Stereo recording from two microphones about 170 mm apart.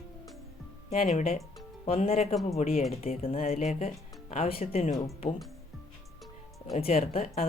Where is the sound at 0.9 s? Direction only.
40° left (ahead or behind).